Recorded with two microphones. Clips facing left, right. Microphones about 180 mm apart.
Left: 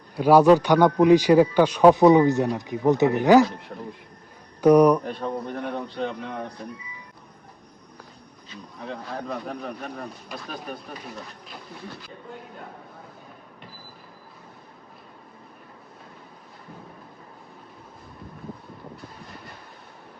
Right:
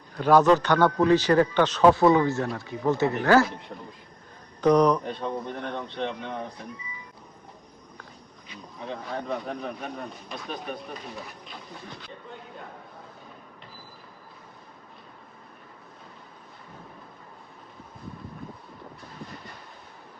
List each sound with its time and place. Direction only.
0.2 s speech: 10° left (ahead or behind)
3.4 s speech: centre (ahead or behind)
8.8 s speech: centre (ahead or behind)